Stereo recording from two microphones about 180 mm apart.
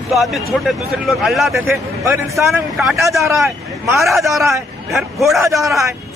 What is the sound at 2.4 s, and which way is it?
Speech, centre (ahead or behind).